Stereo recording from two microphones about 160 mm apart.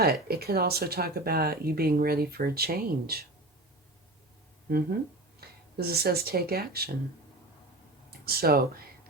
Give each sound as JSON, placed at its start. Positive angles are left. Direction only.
{"t": 0.0, "sound": "speech", "side_deg": -75}
{"t": 5.4, "sound": "speech", "side_deg": -75}
{"t": 8.2, "sound": "speech", "side_deg": -70}